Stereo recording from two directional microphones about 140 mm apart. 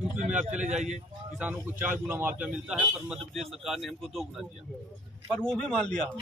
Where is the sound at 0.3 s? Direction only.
10° right (ahead or behind).